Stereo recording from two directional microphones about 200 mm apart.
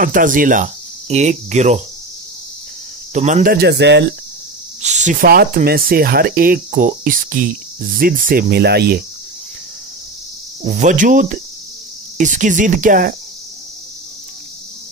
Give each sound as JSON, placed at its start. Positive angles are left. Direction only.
{"t": 0.0, "sound": "cricket", "side_deg": -40}
{"t": 3.1, "sound": "speech", "side_deg": -35}
{"t": 3.5, "sound": "speech", "side_deg": -55}
{"t": 4.8, "sound": "speech", "side_deg": -35}
{"t": 10.6, "sound": "speech", "side_deg": -35}